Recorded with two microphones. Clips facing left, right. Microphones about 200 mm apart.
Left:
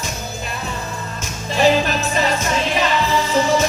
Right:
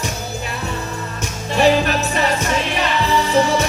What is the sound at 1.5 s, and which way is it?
Music, 65° right (ahead or behind).